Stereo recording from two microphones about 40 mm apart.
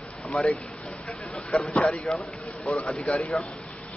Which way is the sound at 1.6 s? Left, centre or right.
Left.